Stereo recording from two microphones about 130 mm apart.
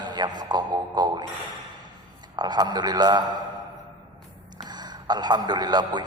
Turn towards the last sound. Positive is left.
turn(degrees=-35)  # may be behind; listen again after turning